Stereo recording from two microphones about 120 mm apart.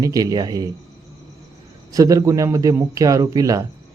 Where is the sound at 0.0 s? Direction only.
30° right (ahead or behind).